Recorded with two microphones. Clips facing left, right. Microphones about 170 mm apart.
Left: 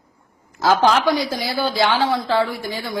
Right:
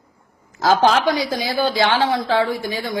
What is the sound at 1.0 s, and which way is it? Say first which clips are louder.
A woman's voice: even; 20° right (ahead or behind).